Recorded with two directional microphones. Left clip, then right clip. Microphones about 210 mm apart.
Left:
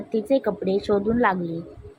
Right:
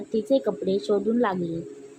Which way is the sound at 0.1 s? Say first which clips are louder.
Left 1 dB; 10° left (ahead or behind).